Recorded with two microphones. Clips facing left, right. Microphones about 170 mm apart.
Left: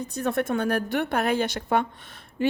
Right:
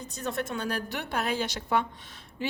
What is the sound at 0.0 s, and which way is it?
A woman's voice, 60° left (ahead or behind).